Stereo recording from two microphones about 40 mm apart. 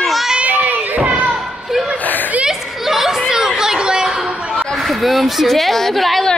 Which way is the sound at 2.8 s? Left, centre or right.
Centre.